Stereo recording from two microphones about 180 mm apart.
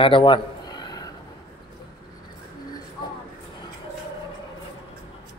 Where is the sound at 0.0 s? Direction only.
25° left (ahead or behind).